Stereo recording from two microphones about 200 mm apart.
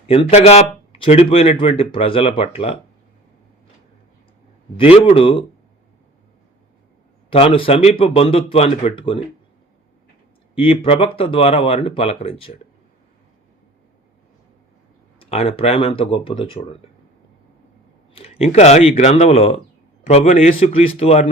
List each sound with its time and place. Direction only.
0.1 s speech: 30° left (ahead or behind)
4.8 s speech: 30° left (ahead or behind)
7.3 s speech: 25° left (ahead or behind)
10.5 s speech: 30° left (ahead or behind)
15.2 s speech: 30° left (ahead or behind)
18.1 s speech: 30° left (ahead or behind)